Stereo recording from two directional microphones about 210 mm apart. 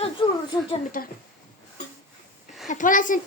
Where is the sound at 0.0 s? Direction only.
25° left (ahead or behind).